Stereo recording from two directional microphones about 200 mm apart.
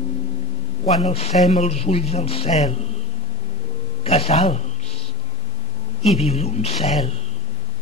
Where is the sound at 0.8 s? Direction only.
30° left (ahead or behind).